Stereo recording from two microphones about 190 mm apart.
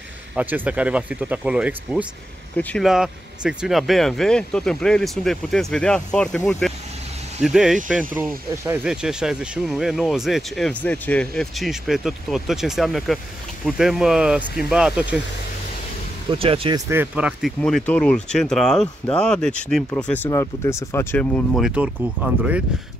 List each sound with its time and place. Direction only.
0.4 s speech: 10° right (ahead or behind)
16.3 s speech: 30° right (ahead or behind)
16.9 s speech: 10° right (ahead or behind)
17.6 s speech: 5° left (ahead or behind)